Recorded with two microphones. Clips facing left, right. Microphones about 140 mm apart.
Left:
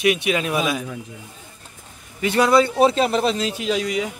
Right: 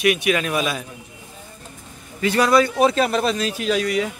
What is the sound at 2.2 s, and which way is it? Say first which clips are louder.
Speech: even; 20° left (ahead or behind).